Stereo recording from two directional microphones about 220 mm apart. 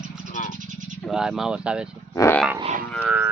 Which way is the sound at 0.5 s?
35° right (ahead or behind).